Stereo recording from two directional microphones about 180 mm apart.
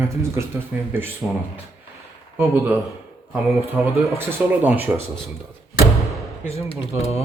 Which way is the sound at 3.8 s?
10° right (ahead or behind).